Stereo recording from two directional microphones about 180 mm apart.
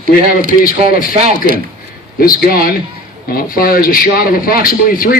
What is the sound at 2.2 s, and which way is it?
A man's voice, 55° left (ahead or behind).